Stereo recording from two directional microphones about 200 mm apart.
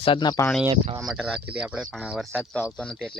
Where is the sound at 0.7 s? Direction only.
30° right (ahead or behind).